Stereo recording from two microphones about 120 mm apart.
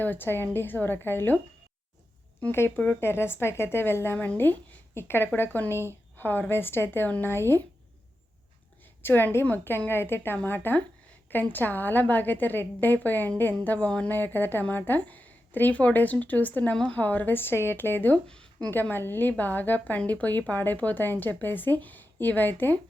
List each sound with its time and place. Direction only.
0.0 s speech: 15° left (ahead or behind)
2.4 s a woman's voice: 20° left (ahead or behind)
9.0 s speech: 15° left (ahead or behind)